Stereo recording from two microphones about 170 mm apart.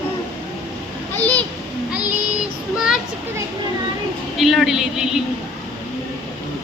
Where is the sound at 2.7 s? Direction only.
5° right (ahead or behind).